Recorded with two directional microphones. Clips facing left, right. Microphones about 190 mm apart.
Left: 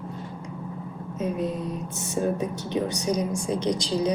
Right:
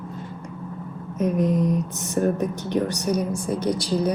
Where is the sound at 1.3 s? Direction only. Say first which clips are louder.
Right 7 dB; 15° right (ahead or behind).